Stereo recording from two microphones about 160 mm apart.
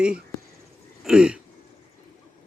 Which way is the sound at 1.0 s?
5° right (ahead or behind).